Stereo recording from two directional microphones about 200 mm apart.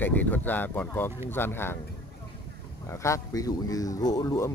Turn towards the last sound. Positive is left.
turn(degrees=15)  # may be behind; listen again after turning